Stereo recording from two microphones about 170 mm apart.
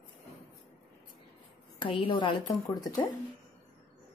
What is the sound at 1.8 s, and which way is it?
A woman's voice, 30° left (ahead or behind).